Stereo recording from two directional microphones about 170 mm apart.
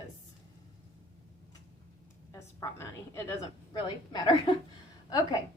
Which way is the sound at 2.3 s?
15° left (ahead or behind).